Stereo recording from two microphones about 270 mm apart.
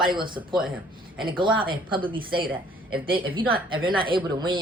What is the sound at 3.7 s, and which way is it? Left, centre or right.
Speech, centre.